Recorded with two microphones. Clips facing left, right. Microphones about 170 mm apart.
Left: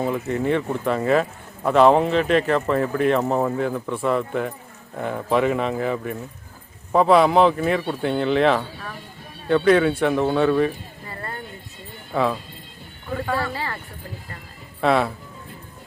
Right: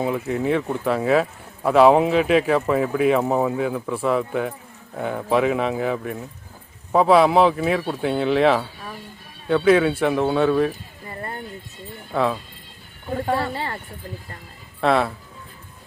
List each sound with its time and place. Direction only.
0.0 s speech: 5° right (ahead or behind)
12.1 s speech: centre (ahead or behind)
13.1 s speech: 30° right (ahead or behind)
14.8 s speech: centre (ahead or behind)